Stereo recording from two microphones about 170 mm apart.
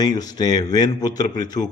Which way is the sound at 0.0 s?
25° left (ahead or behind).